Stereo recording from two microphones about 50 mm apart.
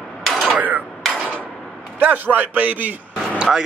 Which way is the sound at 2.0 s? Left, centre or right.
Right.